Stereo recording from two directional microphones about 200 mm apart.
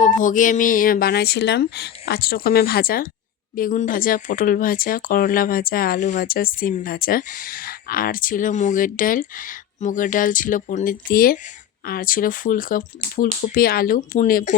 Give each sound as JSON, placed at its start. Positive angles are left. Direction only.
{"t": 0.0, "sound": "speech", "side_deg": 40}